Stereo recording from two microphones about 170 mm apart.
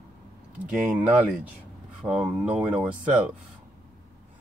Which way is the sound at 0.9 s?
10° right (ahead or behind).